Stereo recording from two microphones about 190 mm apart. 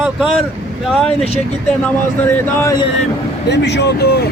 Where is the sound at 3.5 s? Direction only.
65° left (ahead or behind).